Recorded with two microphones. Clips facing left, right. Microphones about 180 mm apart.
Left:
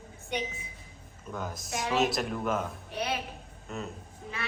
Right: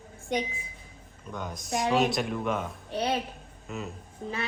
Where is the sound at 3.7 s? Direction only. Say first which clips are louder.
Right 1 dB; centre (ahead or behind).